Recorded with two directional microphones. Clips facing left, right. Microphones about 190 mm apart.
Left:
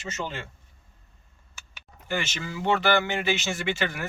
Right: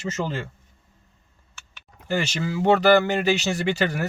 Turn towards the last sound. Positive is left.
turn(degrees=-40)  # may be behind; listen again after turning